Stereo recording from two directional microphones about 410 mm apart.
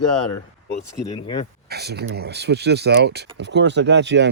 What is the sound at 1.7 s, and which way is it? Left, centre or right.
Speech, right.